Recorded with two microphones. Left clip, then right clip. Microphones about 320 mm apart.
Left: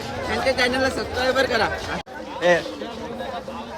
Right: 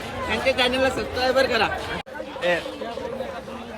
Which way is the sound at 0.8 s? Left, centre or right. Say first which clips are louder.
Even; centre.